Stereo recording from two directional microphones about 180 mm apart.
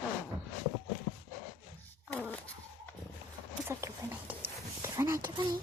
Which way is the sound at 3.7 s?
15° right (ahead or behind).